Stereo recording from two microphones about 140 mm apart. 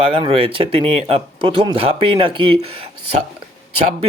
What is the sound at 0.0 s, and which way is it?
Speech, 40° right (ahead or behind).